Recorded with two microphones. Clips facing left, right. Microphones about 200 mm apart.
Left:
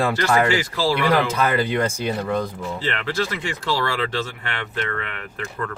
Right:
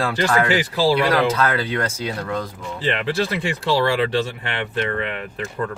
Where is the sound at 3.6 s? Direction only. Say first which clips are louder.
Right 5 dB; 15° right (ahead or behind).